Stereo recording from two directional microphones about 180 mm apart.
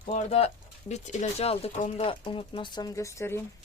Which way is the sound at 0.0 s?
40° left (ahead or behind).